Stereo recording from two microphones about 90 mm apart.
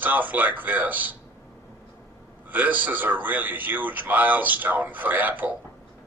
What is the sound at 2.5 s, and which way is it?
Speech, 20° right (ahead or behind).